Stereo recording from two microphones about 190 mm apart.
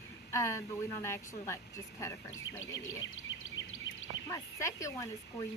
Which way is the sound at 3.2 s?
90° left.